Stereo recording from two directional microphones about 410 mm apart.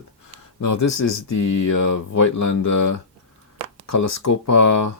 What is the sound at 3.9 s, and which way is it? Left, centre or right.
Speech, left.